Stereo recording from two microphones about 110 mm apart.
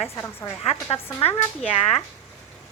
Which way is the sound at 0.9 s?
60° left (ahead or behind).